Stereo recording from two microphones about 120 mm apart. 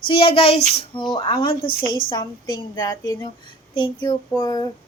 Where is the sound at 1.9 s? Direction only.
40° left (ahead or behind).